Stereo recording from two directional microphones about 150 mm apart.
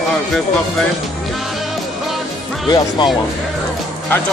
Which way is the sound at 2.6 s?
30° left (ahead or behind).